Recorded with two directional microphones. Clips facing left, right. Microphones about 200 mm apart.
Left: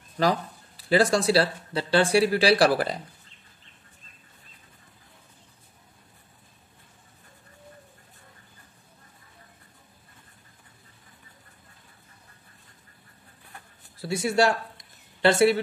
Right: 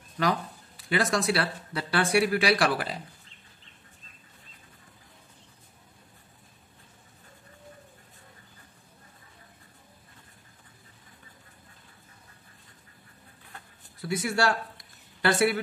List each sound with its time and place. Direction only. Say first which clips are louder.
0.2 s speech: left 3 dB; 35° left (ahead or behind)
14.0 s speech: left 4 dB; 25° left (ahead or behind)